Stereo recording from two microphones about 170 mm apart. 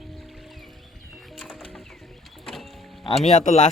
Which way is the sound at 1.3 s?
Centre (ahead or behind).